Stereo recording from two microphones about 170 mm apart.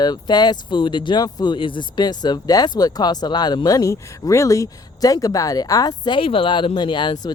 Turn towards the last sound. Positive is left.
turn(degrees=25)  # may be behind; listen again after turning